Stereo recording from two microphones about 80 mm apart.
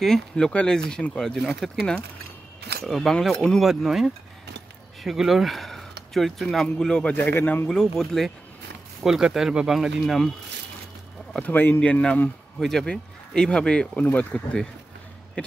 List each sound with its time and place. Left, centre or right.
0.0 s speech: centre
3.6 s speech: centre
7.2 s speech: left
7.6 s speech: centre
11.3 s speech: left